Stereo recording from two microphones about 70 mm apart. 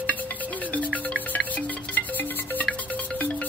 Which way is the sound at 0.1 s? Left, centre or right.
Left.